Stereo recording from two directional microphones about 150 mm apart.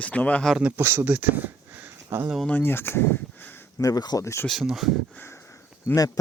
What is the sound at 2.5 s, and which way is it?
Speech, 15° left (ahead or behind).